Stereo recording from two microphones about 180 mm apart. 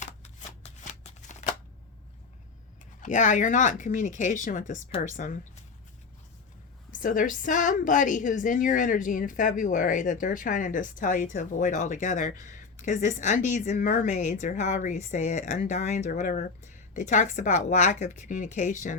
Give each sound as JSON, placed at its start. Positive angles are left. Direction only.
{"t": 0.0, "sound": "shuffling cards", "side_deg": 40}
{"t": 3.0, "sound": "a woman's voice", "side_deg": 45}
{"t": 6.9, "sound": "a woman's voice", "side_deg": 50}